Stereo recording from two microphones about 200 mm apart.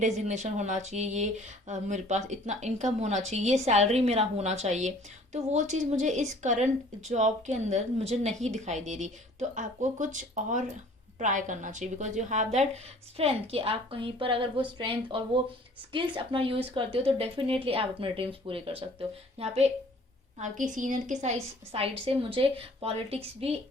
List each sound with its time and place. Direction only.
0.0 s a woman's voice: 35° right (ahead or behind)